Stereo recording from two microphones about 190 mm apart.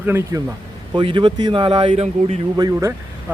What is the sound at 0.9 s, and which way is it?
A man's voice, 25° right (ahead or behind).